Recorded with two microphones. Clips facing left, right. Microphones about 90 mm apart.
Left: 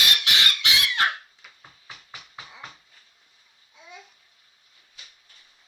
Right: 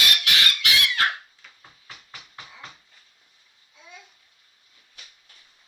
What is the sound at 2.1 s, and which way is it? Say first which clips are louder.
Music: left 1 dB; 15° left (ahead or behind).